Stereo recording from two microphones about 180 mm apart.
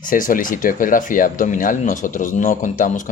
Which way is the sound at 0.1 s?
50° left (ahead or behind).